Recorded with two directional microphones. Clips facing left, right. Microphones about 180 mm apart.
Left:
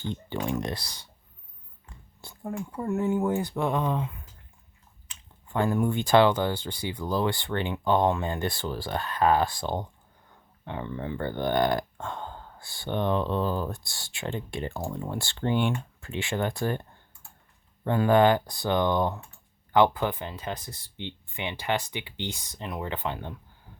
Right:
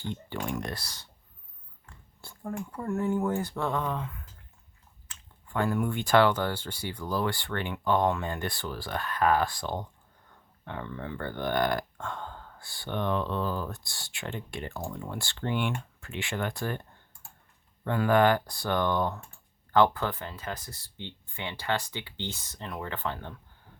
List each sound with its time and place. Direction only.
0.3 s speech: 20° left (ahead or behind)
5.1 s a sound: 20° left (ahead or behind)
5.5 s speech: 25° left (ahead or behind)
17.8 s speech: 25° left (ahead or behind)